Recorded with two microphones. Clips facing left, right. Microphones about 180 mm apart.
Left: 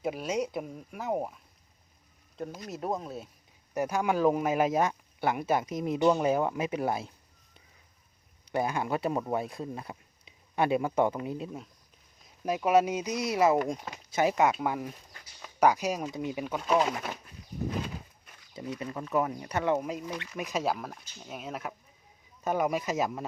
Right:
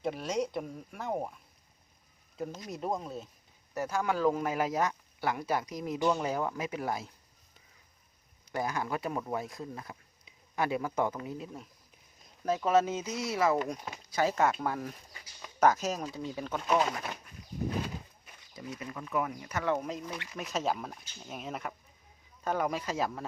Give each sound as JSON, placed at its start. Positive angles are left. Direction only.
{"t": 0.0, "sound": "speech", "side_deg": 5}
{"t": 2.6, "sound": "speech", "side_deg": 0}
{"t": 3.8, "sound": "speech", "side_deg": 15}
{"t": 8.5, "sound": "speech", "side_deg": 25}
{"t": 12.5, "sound": "speech", "side_deg": 10}
{"t": 18.5, "sound": "speech", "side_deg": 30}
{"t": 19.7, "sound": "speech", "side_deg": 5}